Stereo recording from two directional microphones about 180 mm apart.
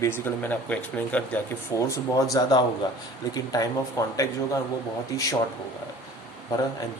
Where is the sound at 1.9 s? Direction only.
20° left (ahead or behind).